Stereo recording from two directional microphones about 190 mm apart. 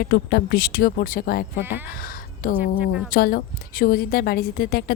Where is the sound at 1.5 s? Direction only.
10° right (ahead or behind).